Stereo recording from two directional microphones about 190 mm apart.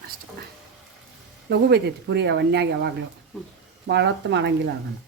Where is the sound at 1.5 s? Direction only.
60° right (ahead or behind).